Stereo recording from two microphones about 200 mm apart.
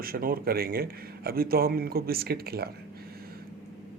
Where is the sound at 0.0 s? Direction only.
45° right (ahead or behind).